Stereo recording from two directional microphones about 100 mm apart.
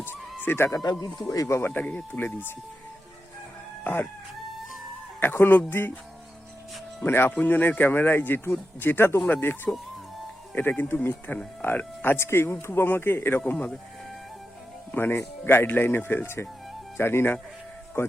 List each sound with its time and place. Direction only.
0.4 s speech: 25° left (ahead or behind)
1.0 s speech: 35° left (ahead or behind); by 2.5 s 20° left (ahead or behind)
3.8 s chicken: 20° left (ahead or behind)
5.2 s speech: 20° left (ahead or behind)
7.0 s speech: 20° left (ahead or behind)
14.9 s speech: 20° left (ahead or behind)